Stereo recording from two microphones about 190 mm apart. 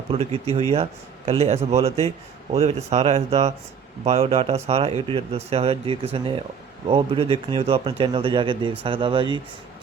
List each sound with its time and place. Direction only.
0.1 s a man's voice: 30° right (ahead or behind)